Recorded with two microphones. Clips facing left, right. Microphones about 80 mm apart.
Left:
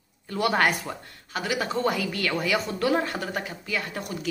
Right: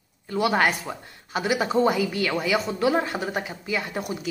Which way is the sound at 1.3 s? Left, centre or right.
Centre.